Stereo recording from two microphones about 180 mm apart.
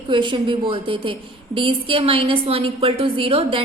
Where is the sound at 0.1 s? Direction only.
25° right (ahead or behind).